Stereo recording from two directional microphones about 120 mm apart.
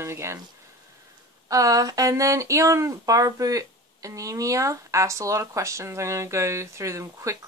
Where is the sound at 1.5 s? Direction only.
30° right (ahead or behind).